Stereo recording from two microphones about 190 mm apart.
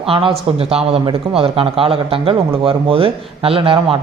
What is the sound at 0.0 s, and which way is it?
A man's voice, 30° right (ahead or behind).